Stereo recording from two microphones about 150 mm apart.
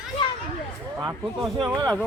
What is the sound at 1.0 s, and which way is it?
Speech, 25° right (ahead or behind).